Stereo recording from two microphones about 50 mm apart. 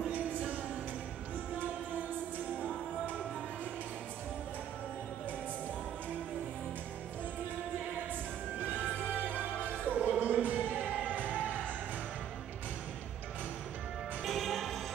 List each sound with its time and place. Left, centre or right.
9.3 s music: right
14.2 s music: centre